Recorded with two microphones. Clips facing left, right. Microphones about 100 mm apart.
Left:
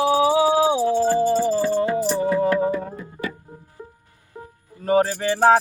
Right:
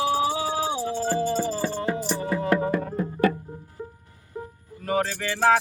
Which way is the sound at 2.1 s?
30° left (ahead or behind).